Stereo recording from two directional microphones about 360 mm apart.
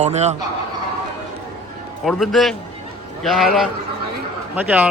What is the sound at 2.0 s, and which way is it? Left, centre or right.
A man's voice, centre.